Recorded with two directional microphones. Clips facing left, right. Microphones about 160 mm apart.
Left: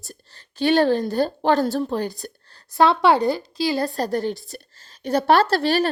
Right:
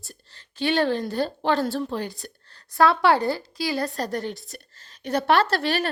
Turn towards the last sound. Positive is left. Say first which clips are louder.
# left 4 dB
turn(degrees=35)  # may be behind; listen again after turning